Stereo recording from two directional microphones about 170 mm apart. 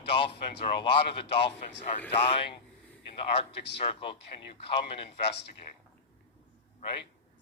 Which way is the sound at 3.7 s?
35° left (ahead or behind).